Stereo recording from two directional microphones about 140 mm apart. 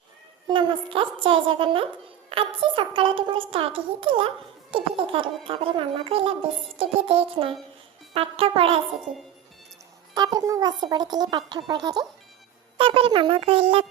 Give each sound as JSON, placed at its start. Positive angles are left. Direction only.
{"t": 0.4, "sound": "a woman's voice", "side_deg": -35}
{"t": 10.2, "sound": "a woman's voice", "side_deg": -30}